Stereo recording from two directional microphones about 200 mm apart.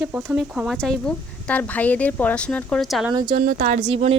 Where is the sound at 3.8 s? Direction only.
30° right (ahead or behind).